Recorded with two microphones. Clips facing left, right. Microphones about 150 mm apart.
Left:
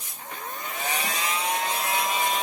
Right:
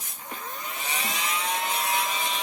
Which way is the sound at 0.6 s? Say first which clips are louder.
Left 5 dB; 40° left (ahead or behind).